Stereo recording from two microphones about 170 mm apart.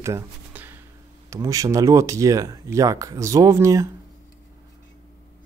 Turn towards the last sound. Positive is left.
turn(degrees=-20)  # may be behind; listen again after turning